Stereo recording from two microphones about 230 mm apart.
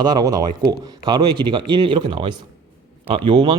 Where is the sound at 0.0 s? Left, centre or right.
Centre.